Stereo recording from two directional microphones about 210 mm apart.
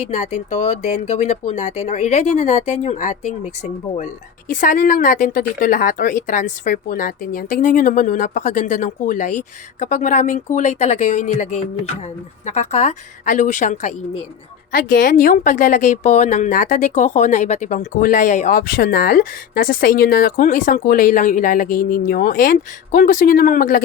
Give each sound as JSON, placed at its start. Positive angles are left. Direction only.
{"t": 0.1, "sound": "speech", "side_deg": 35}